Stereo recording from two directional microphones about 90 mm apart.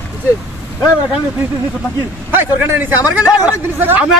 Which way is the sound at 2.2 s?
25° right (ahead or behind).